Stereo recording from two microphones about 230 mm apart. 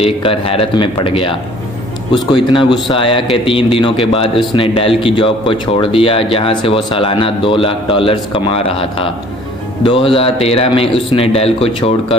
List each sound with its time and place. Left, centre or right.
0.0 s speech: left
2.3 s speech: left